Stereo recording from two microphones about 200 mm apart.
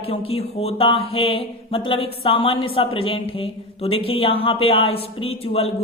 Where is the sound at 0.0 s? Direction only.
30° left (ahead or behind).